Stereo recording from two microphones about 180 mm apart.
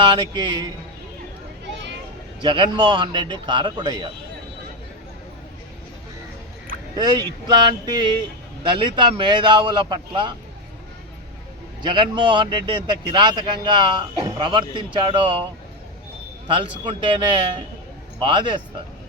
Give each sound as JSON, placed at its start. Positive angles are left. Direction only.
{"t": 0.0, "sound": "a man's voice", "side_deg": -25}
{"t": 2.4, "sound": "a man's voice", "side_deg": -25}
{"t": 6.9, "sound": "a man's voice", "side_deg": -25}
{"t": 11.8, "sound": "a man's voice", "side_deg": -25}
{"t": 16.8, "sound": "a man's voice", "side_deg": -25}